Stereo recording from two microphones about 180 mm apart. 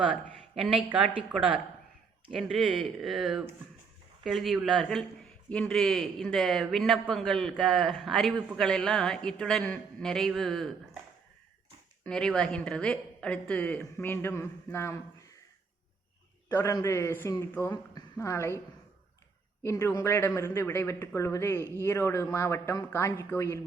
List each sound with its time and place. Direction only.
0.5 s a man's voice: centre (ahead or behind)
2.3 s a man's voice: centre (ahead or behind)
12.0 s a woman's voice: 5° left (ahead or behind)
16.5 s a woman's voice: 15° left (ahead or behind)
19.6 s a woman's voice: 15° left (ahead or behind)